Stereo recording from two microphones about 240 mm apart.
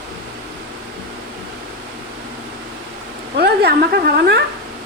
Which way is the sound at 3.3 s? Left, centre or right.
Right.